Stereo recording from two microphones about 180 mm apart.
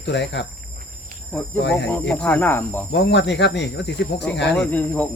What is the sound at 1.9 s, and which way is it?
Speech, 10° left (ahead or behind).